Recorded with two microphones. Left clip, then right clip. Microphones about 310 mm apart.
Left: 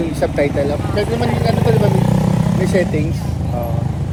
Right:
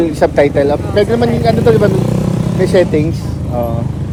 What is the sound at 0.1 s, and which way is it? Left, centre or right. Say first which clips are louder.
Speech: right 7 dB; right.